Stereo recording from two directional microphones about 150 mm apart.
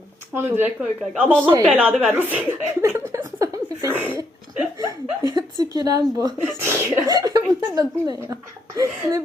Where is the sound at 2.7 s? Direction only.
20° right (ahead or behind).